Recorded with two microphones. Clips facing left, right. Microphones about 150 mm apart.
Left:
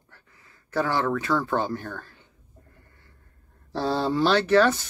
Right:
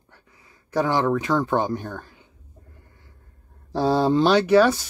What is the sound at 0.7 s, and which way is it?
Speech, 15° right (ahead or behind).